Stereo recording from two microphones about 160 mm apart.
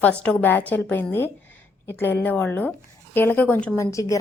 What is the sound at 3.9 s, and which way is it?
Speech, 20° left (ahead or behind).